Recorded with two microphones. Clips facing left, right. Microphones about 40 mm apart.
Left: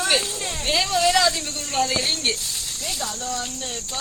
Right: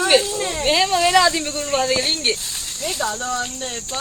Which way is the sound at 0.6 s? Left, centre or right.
Right.